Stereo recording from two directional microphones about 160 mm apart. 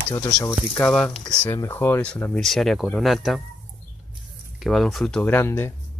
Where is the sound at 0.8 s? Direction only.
5° left (ahead or behind).